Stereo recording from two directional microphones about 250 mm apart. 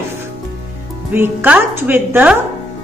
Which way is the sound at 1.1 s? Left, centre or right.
Centre.